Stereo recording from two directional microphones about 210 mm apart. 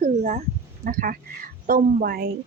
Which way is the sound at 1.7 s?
45° right (ahead or behind).